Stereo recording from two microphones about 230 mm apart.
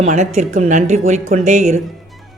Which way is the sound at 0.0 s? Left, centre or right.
Right.